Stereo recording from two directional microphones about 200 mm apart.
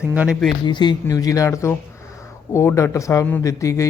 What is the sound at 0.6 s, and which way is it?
A man's voice, 20° left (ahead or behind).